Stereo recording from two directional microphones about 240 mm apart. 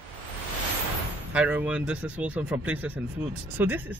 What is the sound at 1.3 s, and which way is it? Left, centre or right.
Speech, centre.